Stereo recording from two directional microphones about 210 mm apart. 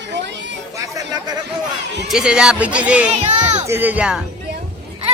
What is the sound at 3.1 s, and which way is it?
Speech, 35° right (ahead or behind).